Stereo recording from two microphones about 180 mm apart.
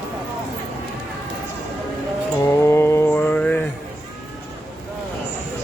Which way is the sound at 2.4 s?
15° left (ahead or behind).